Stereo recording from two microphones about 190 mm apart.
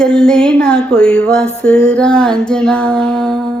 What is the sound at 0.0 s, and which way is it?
Music, 5° left (ahead or behind).